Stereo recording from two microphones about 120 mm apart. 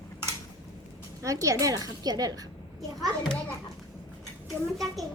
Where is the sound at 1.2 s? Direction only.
25° right (ahead or behind).